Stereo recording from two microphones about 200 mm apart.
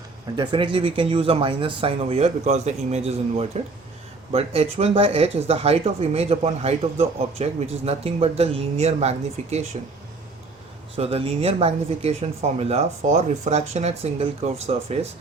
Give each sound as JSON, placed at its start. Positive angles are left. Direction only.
{"t": 0.3, "sound": "speech", "side_deg": -25}
{"t": 10.9, "sound": "speech", "side_deg": -30}